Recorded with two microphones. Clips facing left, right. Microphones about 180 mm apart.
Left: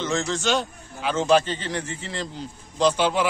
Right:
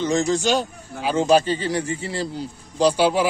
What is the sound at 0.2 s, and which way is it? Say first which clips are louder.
Speech: right 6 dB; 15° right (ahead or behind).